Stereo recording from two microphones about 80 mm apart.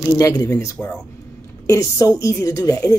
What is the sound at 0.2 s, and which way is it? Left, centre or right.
Speech, left.